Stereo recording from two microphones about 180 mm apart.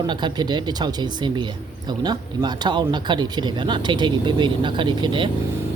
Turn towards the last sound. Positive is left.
turn(degrees=-25)  # may be behind; listen again after turning